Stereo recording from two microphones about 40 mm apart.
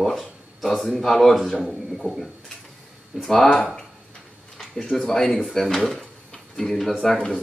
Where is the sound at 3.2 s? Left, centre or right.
Centre.